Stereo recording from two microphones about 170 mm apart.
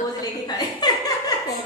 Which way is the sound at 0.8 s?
25° left (ahead or behind).